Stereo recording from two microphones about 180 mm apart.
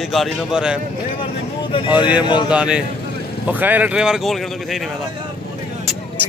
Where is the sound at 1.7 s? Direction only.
25° left (ahead or behind).